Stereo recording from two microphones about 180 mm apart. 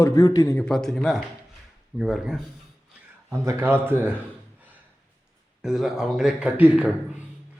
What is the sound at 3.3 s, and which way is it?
Speech, 15° right (ahead or behind).